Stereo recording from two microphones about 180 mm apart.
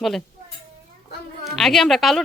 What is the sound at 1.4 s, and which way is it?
Speech, centre (ahead or behind).